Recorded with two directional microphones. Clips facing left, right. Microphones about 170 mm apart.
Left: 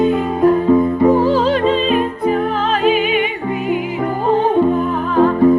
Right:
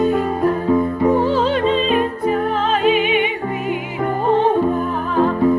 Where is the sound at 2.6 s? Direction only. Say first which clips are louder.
Even; 35° left (ahead or behind).